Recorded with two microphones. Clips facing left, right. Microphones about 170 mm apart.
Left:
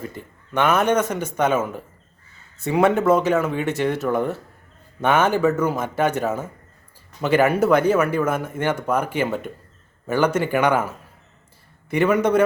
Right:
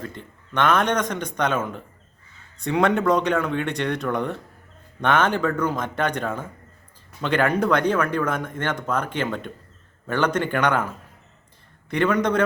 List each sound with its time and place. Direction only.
0.0 s speech: 10° left (ahead or behind)